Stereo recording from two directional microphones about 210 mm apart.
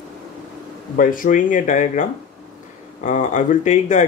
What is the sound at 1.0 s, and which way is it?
Speech, 40° left (ahead or behind).